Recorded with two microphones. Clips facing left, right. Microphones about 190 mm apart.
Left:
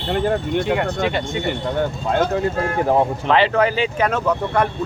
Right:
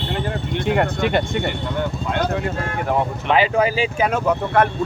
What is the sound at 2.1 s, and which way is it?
Speech, 30° left (ahead or behind).